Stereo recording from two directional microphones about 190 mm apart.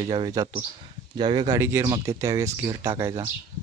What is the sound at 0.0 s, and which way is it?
Speech, 20° right (ahead or behind).